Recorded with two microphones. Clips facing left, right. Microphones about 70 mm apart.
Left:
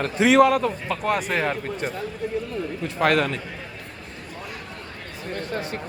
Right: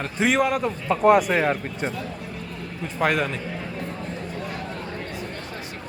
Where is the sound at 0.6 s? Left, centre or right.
Centre.